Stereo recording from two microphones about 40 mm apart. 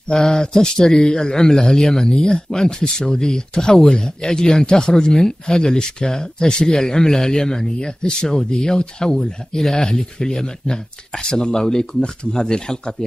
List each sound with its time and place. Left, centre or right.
0.1 s speech: centre